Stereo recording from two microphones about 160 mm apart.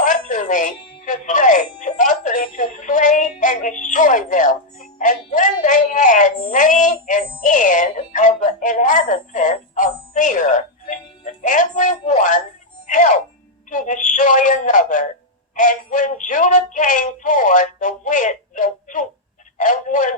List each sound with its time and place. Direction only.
0.0 s speech: 55° left (ahead or behind)